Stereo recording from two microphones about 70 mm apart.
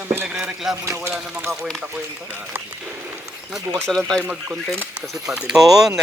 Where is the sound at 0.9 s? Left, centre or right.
Right.